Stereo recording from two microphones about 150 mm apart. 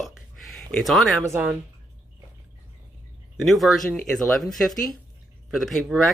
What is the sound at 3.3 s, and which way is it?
Speech, centre (ahead or behind).